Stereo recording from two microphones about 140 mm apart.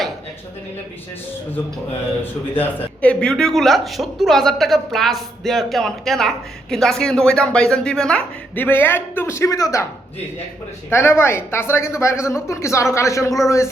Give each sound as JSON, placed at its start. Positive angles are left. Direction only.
{"t": 2.2, "sound": "a man's voice", "side_deg": 15}
{"t": 10.8, "sound": "a woman's voice", "side_deg": 15}